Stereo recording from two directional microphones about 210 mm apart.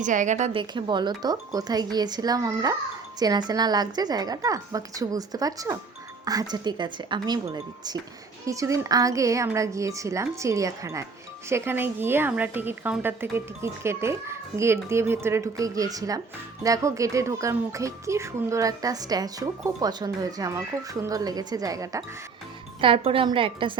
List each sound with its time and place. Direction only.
0.0 s a woman's voice: 35° right (ahead or behind)
0.6 s speech: 20° right (ahead or behind)